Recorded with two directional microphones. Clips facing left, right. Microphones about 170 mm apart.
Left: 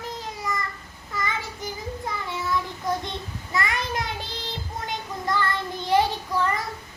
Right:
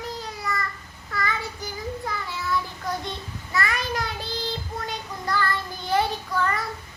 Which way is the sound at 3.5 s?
20° left (ahead or behind).